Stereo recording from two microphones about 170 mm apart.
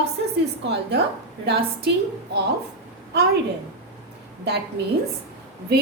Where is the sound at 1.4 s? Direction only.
75° right (ahead or behind).